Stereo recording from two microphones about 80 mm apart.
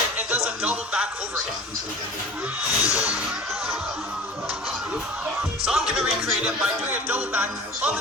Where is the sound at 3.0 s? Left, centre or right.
Centre.